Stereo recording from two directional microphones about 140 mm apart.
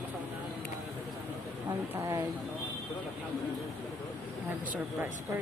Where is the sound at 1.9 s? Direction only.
20° right (ahead or behind).